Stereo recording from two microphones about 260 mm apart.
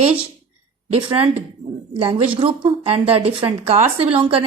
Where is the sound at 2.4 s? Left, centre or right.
Right.